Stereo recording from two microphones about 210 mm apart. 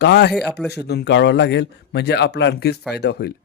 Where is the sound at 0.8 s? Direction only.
50° left (ahead or behind).